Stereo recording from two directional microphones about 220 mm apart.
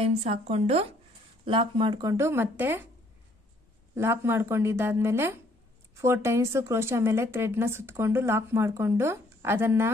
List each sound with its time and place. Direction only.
0.0 s a woman's voice: 25° right (ahead or behind); by 2.9 s 10° right (ahead or behind)
3.9 s a woman's voice: 10° right (ahead or behind)